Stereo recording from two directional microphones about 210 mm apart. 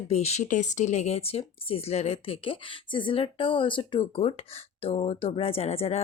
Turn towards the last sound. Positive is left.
turn(degrees=30)  # may be behind; listen again after turning